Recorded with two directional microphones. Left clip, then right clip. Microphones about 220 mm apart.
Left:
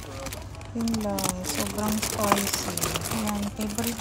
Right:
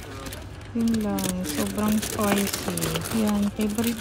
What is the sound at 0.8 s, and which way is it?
Speech, centre (ahead or behind).